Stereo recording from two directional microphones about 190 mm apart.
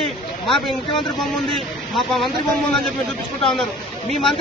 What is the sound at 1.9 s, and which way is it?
Speech, centre (ahead or behind).